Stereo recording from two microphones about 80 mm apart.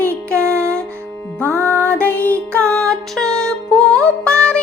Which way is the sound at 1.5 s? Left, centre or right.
Right.